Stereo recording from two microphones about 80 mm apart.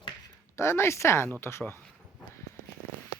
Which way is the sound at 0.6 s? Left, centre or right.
Left.